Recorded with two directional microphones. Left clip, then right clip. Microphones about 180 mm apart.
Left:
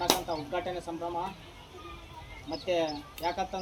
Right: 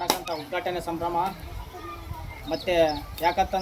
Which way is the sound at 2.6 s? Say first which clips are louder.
Right 8 dB; 10° right (ahead or behind).